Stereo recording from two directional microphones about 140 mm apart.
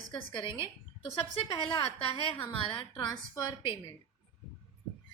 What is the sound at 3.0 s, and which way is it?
Speech, 30° left (ahead or behind).